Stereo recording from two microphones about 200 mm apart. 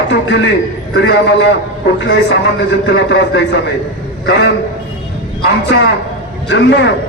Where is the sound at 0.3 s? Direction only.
65° left (ahead or behind).